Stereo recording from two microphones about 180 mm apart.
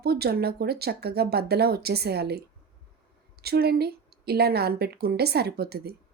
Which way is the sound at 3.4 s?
60° right (ahead or behind).